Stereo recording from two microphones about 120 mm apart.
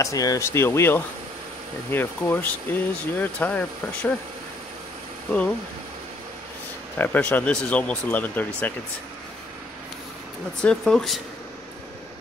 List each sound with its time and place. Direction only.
0.0 s speech: 30° left (ahead or behind); by 4.1 s 15° left (ahead or behind)
7.0 s speech: 15° left (ahead or behind)
10.6 s speech: 5° left (ahead or behind)